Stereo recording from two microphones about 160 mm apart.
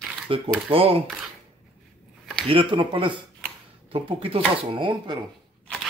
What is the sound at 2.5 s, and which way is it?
Speech, 30° right (ahead or behind).